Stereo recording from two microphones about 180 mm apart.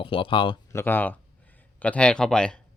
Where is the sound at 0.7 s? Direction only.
15° left (ahead or behind).